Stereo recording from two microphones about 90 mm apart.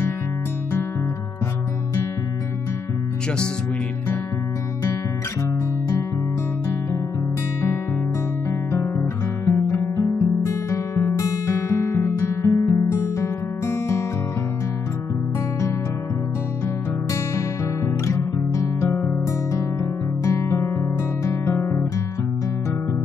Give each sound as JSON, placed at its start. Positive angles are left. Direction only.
{"t": 8.5, "sound": "music", "side_deg": 30}
{"t": 9.5, "sound": "guitar", "side_deg": 30}
{"t": 17.8, "sound": "music", "side_deg": 35}
{"t": 18.9, "sound": "music", "side_deg": 25}